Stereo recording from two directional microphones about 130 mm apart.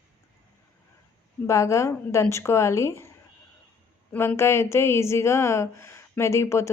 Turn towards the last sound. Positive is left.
turn(degrees=20)  # may be behind; listen again after turning